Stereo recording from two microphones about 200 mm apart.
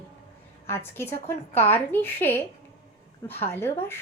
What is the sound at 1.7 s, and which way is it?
Speech, 10° left (ahead or behind).